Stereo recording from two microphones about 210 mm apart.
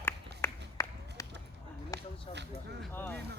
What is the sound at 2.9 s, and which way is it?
Vehicle, 10° left (ahead or behind).